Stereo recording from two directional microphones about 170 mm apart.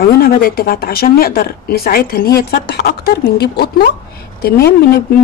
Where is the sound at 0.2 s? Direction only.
60° left (ahead or behind).